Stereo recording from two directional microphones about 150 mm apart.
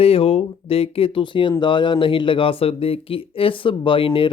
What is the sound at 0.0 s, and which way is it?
Speech, 40° left (ahead or behind).